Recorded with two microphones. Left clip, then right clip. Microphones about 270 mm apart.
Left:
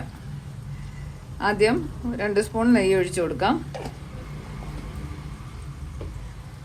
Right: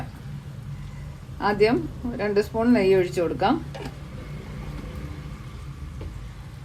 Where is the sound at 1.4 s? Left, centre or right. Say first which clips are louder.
Even; left.